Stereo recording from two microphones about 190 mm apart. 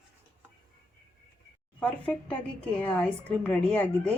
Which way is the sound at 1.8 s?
5° left (ahead or behind).